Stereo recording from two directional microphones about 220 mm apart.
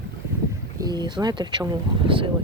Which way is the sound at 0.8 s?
20° right (ahead or behind).